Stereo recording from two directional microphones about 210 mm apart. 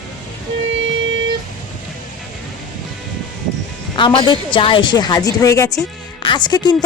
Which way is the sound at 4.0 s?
20° left (ahead or behind).